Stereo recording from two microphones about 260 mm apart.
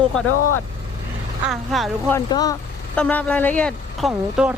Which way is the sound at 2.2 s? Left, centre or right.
Centre.